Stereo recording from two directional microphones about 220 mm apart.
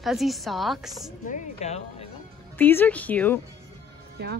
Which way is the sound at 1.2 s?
30° left (ahead or behind).